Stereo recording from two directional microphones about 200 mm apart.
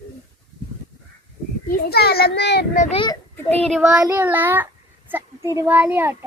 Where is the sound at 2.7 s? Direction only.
35° left (ahead or behind).